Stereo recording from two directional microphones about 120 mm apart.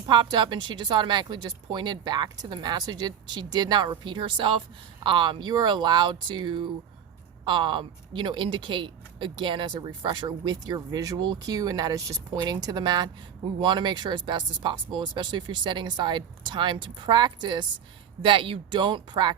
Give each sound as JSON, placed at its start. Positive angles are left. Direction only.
{"t": 0.1, "sound": "speech", "side_deg": -40}